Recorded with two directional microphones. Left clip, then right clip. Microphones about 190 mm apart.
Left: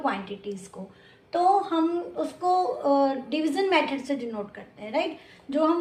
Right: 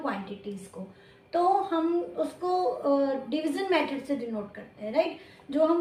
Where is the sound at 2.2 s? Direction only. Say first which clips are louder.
Left 4 dB; 25° left (ahead or behind).